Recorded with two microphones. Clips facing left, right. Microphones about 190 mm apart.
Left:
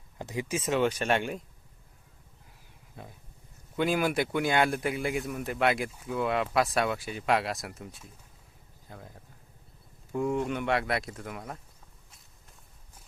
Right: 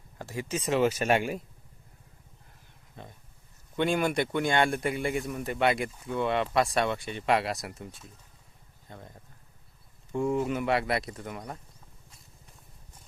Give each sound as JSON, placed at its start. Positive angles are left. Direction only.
{"t": 0.2, "sound": "speech", "side_deg": 20}
{"t": 0.6, "sound": "speech", "side_deg": 0}
{"t": 2.9, "sound": "speech", "side_deg": 5}